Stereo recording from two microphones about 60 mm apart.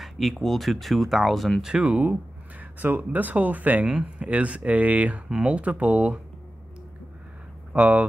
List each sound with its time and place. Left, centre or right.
0.0 s speech: centre
1.6 s speech: centre
2.6 s speech: right
7.7 s speech: centre